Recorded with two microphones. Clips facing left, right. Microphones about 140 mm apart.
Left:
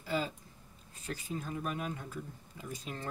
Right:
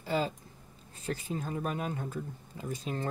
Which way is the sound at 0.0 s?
30° right (ahead or behind).